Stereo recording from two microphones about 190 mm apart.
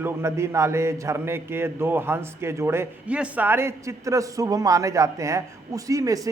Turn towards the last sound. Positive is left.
turn(degrees=-20)  # may be behind; listen again after turning